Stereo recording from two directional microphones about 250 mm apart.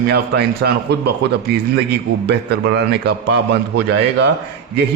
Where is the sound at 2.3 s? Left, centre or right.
Right.